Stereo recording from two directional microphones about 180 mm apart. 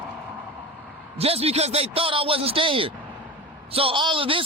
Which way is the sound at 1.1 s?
35° right (ahead or behind).